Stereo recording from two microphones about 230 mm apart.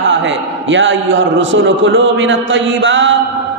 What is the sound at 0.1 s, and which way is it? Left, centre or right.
A man's voice, right.